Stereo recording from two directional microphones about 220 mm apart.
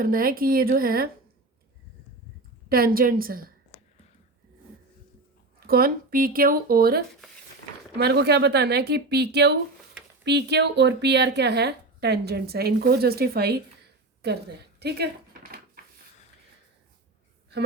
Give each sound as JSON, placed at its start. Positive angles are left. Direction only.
{"t": 0.0, "sound": "speech", "side_deg": -40}
{"t": 2.6, "sound": "speech", "side_deg": -40}
{"t": 5.6, "sound": "a woman's voice", "side_deg": -40}
{"t": 14.2, "sound": "a sound", "side_deg": -50}